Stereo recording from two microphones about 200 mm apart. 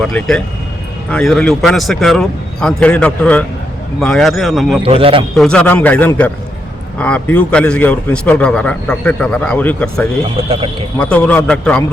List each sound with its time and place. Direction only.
0.0 s speech: 5° left (ahead or behind)
4.8 s a man's voice: 30° right (ahead or behind)
5.4 s a man's voice: 5° left (ahead or behind)
10.5 s a man's voice: 25° right (ahead or behind)
11.0 s speech: 5° left (ahead or behind)